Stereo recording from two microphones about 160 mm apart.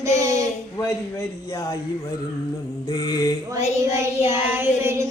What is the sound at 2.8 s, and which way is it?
Speech, 25° left (ahead or behind).